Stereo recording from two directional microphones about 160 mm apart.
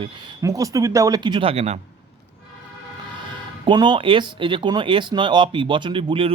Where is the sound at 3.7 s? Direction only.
30° right (ahead or behind).